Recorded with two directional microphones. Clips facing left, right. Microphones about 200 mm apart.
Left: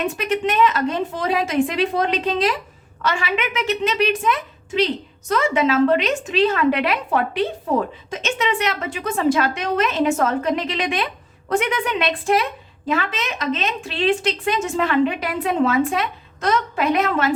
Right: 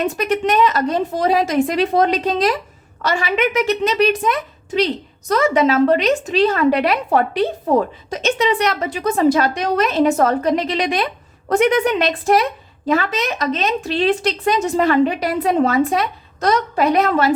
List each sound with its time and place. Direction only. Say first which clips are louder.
0.0 s speech: right 3 dB; 40° right (ahead or behind)